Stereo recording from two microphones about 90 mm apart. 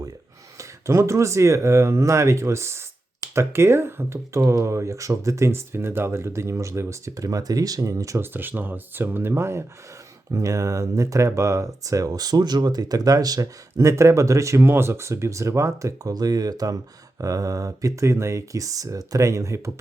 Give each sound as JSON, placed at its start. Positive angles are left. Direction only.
{"t": 0.6, "sound": "speech", "side_deg": -30}
{"t": 8.2, "sound": "speech", "side_deg": -20}